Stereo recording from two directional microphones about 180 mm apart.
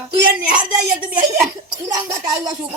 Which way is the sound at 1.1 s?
10° right (ahead or behind).